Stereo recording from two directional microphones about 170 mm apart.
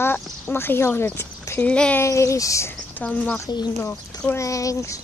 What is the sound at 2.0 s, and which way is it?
Speech, 15° left (ahead or behind).